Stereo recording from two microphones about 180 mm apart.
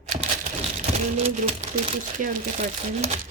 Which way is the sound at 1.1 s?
35° right (ahead or behind).